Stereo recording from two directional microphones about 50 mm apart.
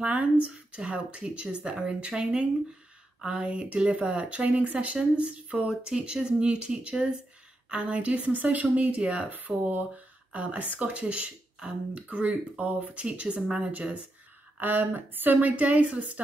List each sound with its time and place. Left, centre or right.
0.0 s speech: right
14.6 s speech: right